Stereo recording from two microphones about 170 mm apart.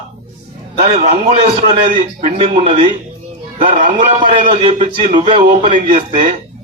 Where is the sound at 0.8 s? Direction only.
35° right (ahead or behind).